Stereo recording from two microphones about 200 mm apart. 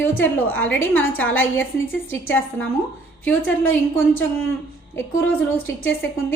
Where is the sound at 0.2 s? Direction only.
10° left (ahead or behind).